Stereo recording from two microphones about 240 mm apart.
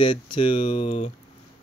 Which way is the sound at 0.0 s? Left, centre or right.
Centre.